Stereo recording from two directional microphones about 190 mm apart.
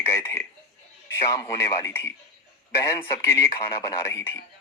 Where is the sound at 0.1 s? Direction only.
15° left (ahead or behind).